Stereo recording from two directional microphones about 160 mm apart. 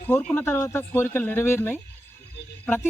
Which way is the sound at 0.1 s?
10° left (ahead or behind).